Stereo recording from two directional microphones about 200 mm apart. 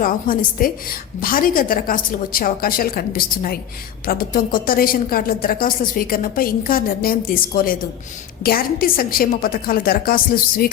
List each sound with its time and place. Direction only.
0.0 s a woman's voice: 45° left (ahead or behind)